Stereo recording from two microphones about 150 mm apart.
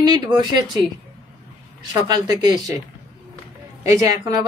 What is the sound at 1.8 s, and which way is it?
Speech, 25° right (ahead or behind).